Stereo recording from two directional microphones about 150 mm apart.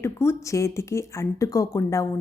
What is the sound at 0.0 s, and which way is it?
Speech, 15° left (ahead or behind).